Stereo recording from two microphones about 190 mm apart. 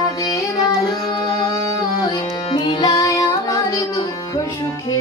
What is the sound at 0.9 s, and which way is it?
Music, 20° left (ahead or behind).